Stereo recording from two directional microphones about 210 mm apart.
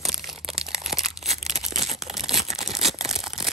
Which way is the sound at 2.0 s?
Centre (ahead or behind).